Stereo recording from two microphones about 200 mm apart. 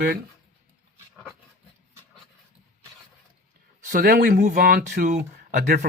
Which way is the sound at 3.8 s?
45° right (ahead or behind).